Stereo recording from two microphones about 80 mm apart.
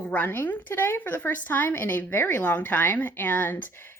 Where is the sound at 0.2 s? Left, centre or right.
Left.